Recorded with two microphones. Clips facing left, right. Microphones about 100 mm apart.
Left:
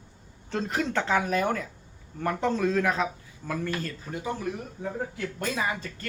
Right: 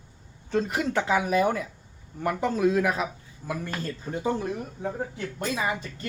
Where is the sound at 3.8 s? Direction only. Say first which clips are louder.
Right 4 dB; 30° right (ahead or behind).